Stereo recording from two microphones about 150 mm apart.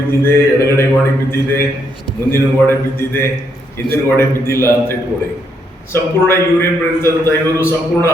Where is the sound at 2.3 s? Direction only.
15° left (ahead or behind).